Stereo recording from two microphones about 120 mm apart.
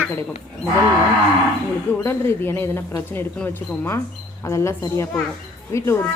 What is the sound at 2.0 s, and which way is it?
Speech, 20° left (ahead or behind).